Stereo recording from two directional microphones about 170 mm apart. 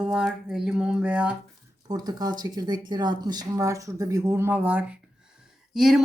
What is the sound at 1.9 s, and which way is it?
Speech, 25° right (ahead or behind).